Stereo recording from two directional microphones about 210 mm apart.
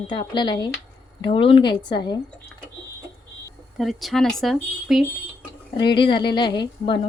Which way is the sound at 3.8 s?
Centre (ahead or behind).